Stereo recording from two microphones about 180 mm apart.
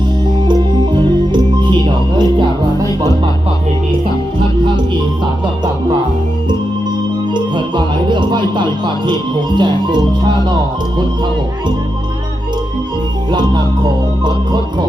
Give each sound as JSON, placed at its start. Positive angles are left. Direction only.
{"t": 0.9, "sound": "music", "side_deg": -25}
{"t": 7.3, "sound": "music", "side_deg": -25}
{"t": 14.3, "sound": "music", "side_deg": -25}